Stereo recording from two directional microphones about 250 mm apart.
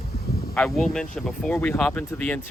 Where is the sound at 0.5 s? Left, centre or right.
Centre.